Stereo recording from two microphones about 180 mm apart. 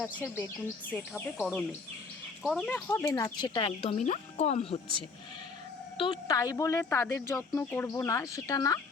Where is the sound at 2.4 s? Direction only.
Centre (ahead or behind); by 4.8 s 35° left (ahead or behind).